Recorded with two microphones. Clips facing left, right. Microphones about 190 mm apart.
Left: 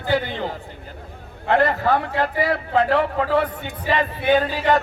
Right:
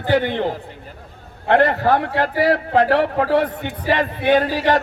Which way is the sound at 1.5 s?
65° right (ahead or behind).